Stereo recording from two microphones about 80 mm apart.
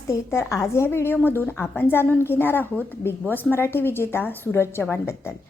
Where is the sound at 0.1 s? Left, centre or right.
Left.